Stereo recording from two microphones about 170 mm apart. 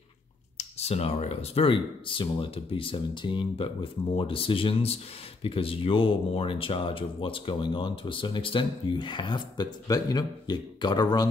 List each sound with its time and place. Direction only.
0.6 s speech: 40° left (ahead or behind)